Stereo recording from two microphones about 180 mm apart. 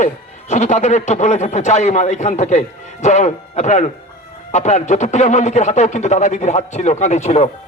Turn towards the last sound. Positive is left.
turn(degrees=40)  # may be behind; listen again after turning